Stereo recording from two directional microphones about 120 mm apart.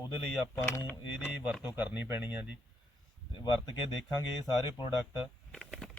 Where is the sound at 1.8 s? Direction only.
15° right (ahead or behind).